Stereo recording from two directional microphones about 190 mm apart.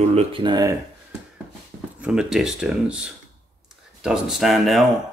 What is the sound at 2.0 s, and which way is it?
Speech, 5° right (ahead or behind).